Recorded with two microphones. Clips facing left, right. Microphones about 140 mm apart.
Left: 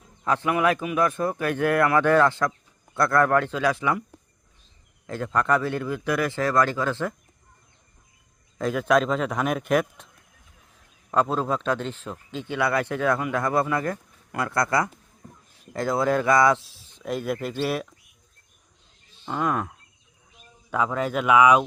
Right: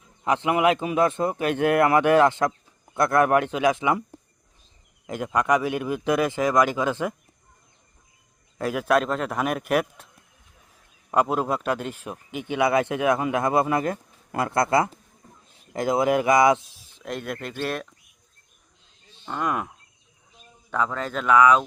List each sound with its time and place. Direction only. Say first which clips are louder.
0.3 s speech: right 2 dB; 20° right (ahead or behind)
5.0 s speech: right 1 dB; 15° right (ahead or behind)
8.5 s a man's voice: left 1 dB; 5° right (ahead or behind)
11.1 s speech: right 1 dB; 10° right (ahead or behind)
17.0 s a man's voice: left 4 dB; centre (ahead or behind)
19.2 s a man's voice: left 1 dB; centre (ahead or behind)
20.7 s speech: left 2 dB; 10° left (ahead or behind)